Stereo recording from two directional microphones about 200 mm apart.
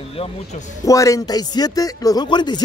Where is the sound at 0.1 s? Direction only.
30° left (ahead or behind).